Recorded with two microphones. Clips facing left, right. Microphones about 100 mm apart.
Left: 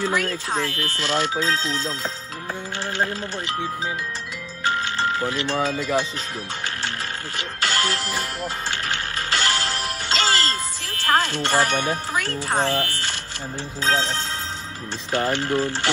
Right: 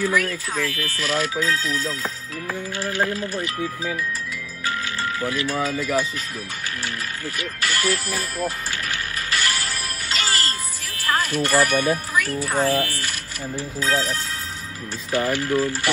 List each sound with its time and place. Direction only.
0.0 s speech: 25° left (ahead or behind)
7.3 s music: 30° left (ahead or behind)
11.1 s speech: 25° left (ahead or behind)